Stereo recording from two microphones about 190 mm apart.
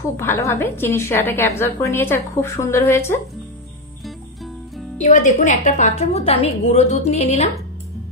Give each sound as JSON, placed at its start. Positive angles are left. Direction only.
{"t": 0.2, "sound": "a woman's voice", "side_deg": 15}
{"t": 4.9, "sound": "a woman's voice", "side_deg": 40}